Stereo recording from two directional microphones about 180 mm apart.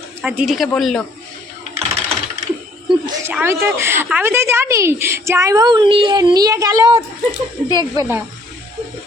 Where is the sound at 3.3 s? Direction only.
10° right (ahead or behind).